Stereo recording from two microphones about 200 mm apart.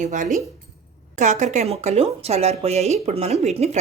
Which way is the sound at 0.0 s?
40° right (ahead or behind).